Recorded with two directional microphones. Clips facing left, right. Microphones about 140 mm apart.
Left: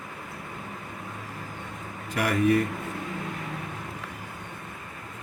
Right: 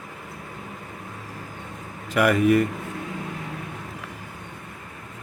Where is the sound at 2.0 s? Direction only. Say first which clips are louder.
Right 7 dB; 90° right.